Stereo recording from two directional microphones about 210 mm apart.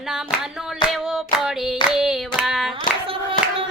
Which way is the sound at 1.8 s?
Centre (ahead or behind).